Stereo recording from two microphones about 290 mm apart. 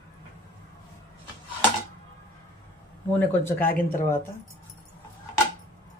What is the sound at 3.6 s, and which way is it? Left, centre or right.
Speech, left.